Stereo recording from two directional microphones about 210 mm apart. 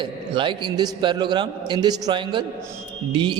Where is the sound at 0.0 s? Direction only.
25° right (ahead or behind).